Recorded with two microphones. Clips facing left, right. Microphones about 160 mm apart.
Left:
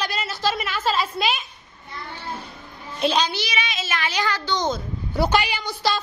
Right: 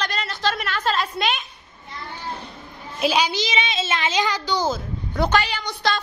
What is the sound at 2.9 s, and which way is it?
A woman's voice, 5° right (ahead or behind).